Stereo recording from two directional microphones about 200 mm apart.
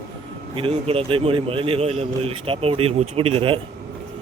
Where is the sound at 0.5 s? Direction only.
25° right (ahead or behind).